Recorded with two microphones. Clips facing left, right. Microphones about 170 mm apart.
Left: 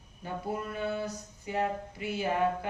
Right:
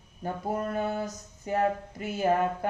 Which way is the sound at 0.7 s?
45° right (ahead or behind).